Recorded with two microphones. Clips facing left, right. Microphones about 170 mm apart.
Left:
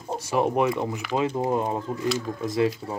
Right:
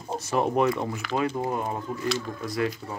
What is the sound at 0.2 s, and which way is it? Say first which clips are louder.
Speech: left 1 dB; 10° left (ahead or behind).